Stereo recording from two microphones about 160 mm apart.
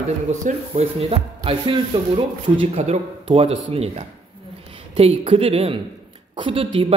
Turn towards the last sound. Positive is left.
turn(degrees=-35)  # may be behind; listen again after turning